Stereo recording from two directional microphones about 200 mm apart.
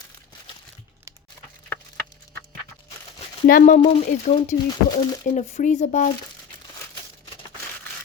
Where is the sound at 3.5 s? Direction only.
40° left (ahead or behind).